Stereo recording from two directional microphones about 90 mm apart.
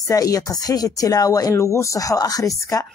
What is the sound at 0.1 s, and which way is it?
Speech, 40° left (ahead or behind).